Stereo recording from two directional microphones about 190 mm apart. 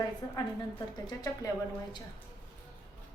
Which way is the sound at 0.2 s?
20° left (ahead or behind).